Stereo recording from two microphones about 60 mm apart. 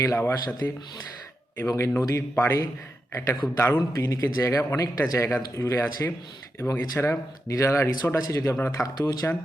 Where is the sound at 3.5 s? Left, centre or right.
Left.